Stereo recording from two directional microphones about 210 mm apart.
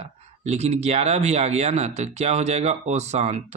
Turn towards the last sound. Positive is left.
turn(degrees=-30)  # may be behind; listen again after turning